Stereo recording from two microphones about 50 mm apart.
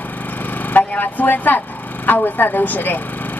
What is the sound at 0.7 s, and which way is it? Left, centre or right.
Speech, left.